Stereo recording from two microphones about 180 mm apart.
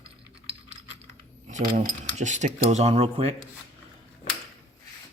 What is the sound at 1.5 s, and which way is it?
A man's voice, 45° right (ahead or behind).